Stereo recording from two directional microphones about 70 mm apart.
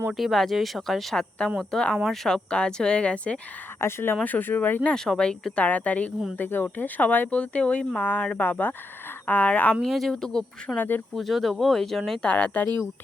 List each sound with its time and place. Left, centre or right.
0.1 s speech: centre
3.8 s speech: left
4.9 s speech: centre
5.6 s speech: left
9.8 s speech: centre
10.8 s speech: left
11.1 s speech: centre
12.2 s speech: centre